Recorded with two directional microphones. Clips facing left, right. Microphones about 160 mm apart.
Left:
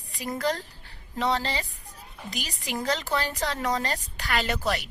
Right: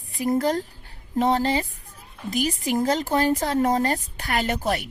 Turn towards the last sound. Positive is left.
turn(degrees=-50)  # may be behind; listen again after turning